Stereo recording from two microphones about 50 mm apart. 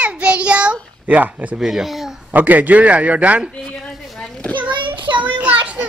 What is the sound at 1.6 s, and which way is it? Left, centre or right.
Speech, centre.